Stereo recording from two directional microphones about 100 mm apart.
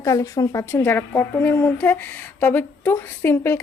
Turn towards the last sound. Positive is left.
turn(degrees=25)  # may be behind; listen again after turning